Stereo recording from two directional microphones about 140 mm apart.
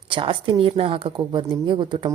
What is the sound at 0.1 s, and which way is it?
Speech, 35° right (ahead or behind).